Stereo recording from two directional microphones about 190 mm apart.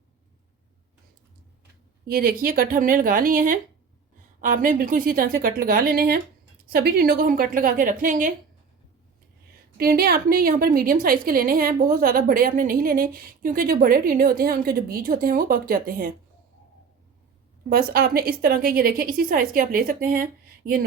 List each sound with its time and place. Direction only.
2.0 s a woman's voice: 50° right (ahead or behind)
9.7 s a woman's voice: 55° right (ahead or behind)
17.7 s a woman's voice: 55° right (ahead or behind)